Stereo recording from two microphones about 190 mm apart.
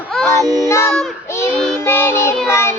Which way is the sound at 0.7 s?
15° left (ahead or behind).